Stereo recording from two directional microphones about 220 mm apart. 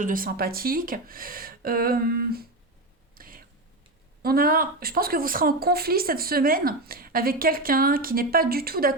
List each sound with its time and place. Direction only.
0.0 s a woman's voice: 40° right (ahead or behind)
3.2 s a sound: 40° right (ahead or behind)
4.2 s a woman's voice: 40° right (ahead or behind)